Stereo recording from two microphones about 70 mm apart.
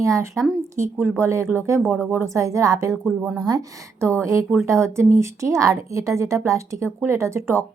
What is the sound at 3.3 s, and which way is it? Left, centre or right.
Speech, right.